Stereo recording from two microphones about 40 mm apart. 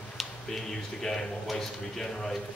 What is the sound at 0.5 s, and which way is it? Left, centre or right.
A man's voice, centre.